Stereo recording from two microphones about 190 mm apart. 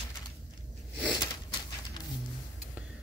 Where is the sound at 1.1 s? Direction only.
20° left (ahead or behind).